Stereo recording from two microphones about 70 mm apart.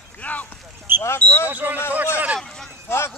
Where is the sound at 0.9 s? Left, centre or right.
Right.